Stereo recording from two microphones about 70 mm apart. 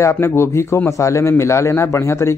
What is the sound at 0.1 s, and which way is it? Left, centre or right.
A man's voice, left.